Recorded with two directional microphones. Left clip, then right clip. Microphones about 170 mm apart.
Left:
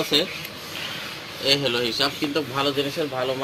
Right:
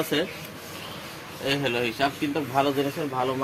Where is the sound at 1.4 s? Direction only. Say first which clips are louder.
Left 4 dB; 65° right (ahead or behind).